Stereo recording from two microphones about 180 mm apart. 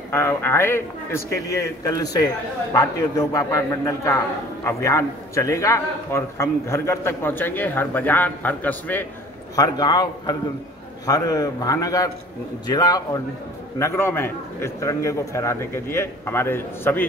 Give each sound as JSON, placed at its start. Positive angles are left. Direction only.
{"t": 0.1, "sound": "a man's voice", "side_deg": 15}
{"t": 9.6, "sound": "a man's voice", "side_deg": 20}